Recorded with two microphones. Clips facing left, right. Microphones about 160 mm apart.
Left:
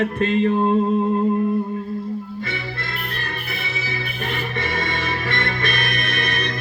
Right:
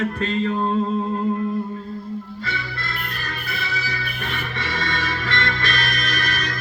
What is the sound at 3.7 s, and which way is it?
Music, 25° left (ahead or behind).